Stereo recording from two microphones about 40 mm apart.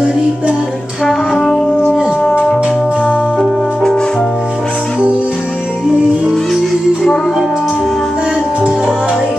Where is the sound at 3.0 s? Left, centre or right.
Centre.